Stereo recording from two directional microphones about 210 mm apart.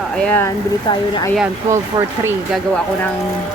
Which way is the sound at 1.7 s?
15° right (ahead or behind).